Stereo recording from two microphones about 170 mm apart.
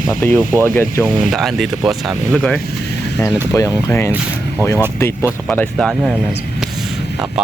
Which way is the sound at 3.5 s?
15° left (ahead or behind).